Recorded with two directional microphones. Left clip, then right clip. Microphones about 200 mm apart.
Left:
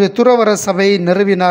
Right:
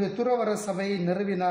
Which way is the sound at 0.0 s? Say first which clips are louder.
Left 15 dB; 45° left (ahead or behind).